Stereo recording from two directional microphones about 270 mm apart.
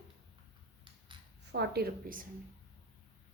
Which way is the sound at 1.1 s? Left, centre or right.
Centre.